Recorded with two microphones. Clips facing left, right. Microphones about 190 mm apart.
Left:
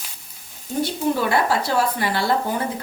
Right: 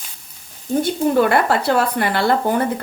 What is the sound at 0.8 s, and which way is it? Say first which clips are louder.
Speech: right 5 dB; 55° right (ahead or behind).